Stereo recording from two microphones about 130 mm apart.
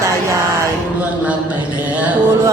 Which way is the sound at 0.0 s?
25° right (ahead or behind).